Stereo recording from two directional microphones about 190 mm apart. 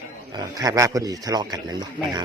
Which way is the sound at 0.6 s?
15° right (ahead or behind).